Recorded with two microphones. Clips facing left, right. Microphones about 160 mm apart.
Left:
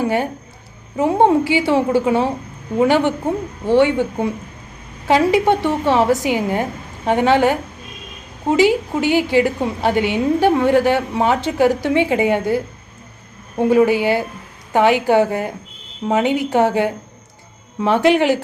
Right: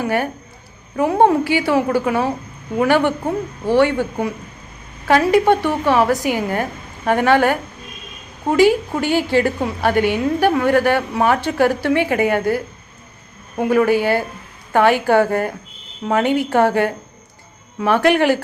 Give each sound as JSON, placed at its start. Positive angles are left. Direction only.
{"t": 0.9, "sound": "a woman's voice", "side_deg": 20}
{"t": 13.7, "sound": "a woman's voice", "side_deg": 15}